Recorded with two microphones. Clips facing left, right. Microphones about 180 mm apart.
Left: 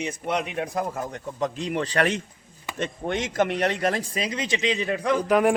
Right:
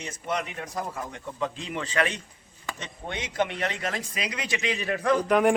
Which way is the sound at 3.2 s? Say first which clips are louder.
Left 4 dB; 45° left (ahead or behind).